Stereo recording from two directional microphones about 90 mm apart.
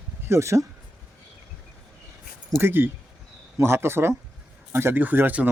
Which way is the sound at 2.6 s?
25° right (ahead or behind).